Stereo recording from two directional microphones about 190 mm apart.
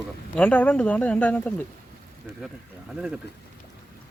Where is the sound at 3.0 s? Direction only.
5° right (ahead or behind).